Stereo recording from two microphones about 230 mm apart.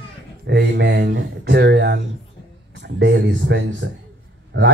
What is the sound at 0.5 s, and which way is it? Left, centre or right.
Speech, right.